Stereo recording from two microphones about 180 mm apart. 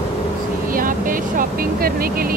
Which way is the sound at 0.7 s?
50° right (ahead or behind).